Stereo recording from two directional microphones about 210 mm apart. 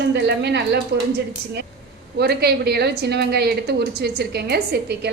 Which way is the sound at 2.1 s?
50° right (ahead or behind).